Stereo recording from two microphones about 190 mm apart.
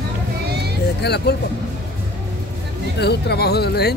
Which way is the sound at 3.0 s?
60° left (ahead or behind).